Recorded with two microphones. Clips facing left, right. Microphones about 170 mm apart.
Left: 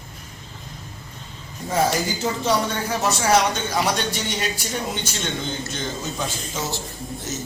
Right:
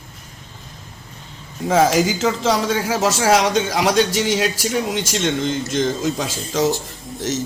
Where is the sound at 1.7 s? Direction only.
90° right.